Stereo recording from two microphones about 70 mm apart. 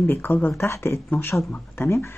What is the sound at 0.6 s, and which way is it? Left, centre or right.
Speech, left.